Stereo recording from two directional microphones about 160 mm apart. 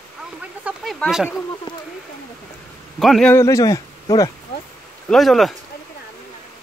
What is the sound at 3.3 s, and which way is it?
Speech, 20° left (ahead or behind).